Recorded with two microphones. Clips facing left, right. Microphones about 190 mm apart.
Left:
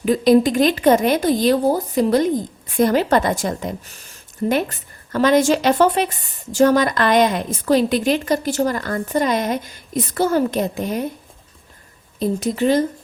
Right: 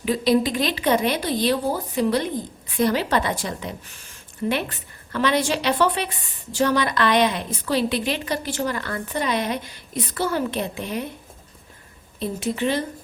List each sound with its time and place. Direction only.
0.0 s a woman's voice: 45° left (ahead or behind)
12.2 s speech: 40° left (ahead or behind)